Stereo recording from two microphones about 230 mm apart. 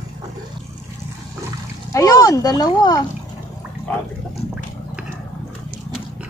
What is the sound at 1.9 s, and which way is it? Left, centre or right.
Speech, centre.